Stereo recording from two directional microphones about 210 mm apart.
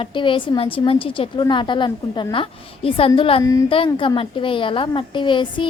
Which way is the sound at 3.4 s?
15° left (ahead or behind).